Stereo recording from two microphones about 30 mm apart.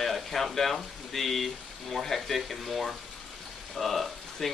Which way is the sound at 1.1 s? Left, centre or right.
Centre.